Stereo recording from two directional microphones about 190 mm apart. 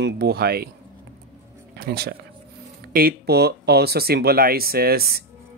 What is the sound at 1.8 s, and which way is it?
Speech, 55° right (ahead or behind).